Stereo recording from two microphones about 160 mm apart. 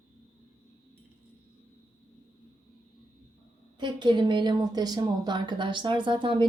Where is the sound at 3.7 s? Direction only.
30° right (ahead or behind).